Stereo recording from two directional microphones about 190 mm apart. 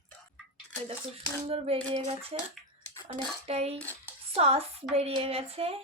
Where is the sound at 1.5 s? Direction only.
30° right (ahead or behind).